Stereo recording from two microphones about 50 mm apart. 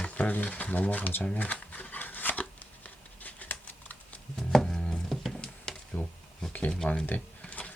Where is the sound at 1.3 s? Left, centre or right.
Left.